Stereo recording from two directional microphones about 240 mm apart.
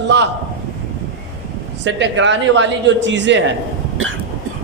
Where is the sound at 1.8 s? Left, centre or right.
Right.